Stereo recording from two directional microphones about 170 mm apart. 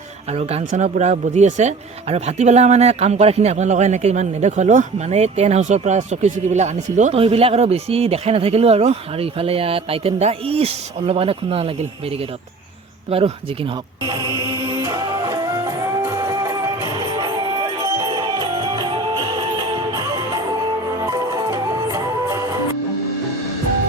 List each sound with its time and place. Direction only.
0.3 s speech: 40° right (ahead or behind)
13.1 s speech: 35° right (ahead or behind)
14.0 s music: 25° right (ahead or behind)